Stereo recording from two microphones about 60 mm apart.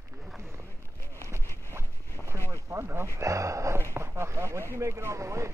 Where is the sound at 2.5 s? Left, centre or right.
Right.